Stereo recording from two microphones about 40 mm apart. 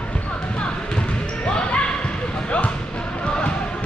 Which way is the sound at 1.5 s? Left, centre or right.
Left.